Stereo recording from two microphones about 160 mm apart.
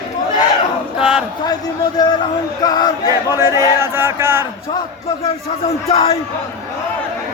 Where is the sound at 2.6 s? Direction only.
25° left (ahead or behind).